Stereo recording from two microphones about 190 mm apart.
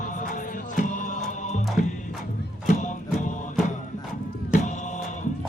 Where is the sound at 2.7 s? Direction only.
40° left (ahead or behind).